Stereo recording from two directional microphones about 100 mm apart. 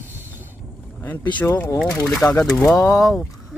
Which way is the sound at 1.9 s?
30° left (ahead or behind).